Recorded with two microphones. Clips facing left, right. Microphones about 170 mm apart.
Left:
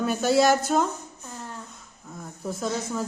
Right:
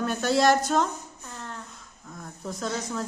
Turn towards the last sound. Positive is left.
turn(degrees=5)  # may be behind; listen again after turning